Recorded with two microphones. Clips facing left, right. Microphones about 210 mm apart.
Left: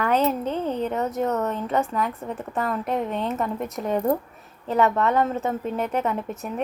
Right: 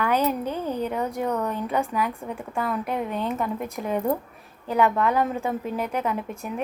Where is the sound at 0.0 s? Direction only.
10° right (ahead or behind).